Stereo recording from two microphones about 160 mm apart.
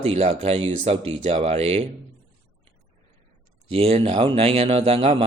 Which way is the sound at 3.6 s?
40° right (ahead or behind).